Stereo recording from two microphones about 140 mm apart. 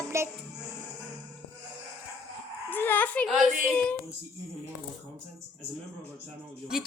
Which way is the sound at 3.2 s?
Centre (ahead or behind).